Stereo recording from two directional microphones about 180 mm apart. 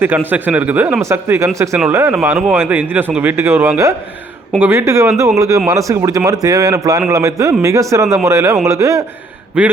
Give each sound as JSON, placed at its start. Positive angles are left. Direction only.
{"t": 0.3, "sound": "speech", "side_deg": -10}
{"t": 9.6, "sound": "speech", "side_deg": -5}